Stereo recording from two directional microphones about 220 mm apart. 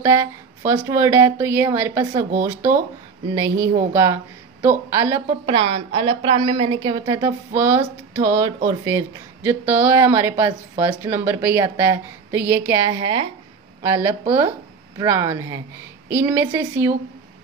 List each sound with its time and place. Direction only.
0.0 s speech: 10° right (ahead or behind)
3.3 s speech: 10° right (ahead or behind)
5.5 s a woman's voice: 25° right (ahead or behind)